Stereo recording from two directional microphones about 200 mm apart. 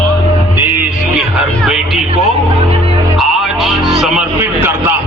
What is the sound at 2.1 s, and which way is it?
Music, 30° right (ahead or behind).